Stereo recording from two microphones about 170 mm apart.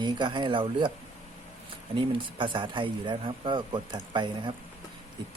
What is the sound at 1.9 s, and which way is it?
A man's voice, 30° right (ahead or behind).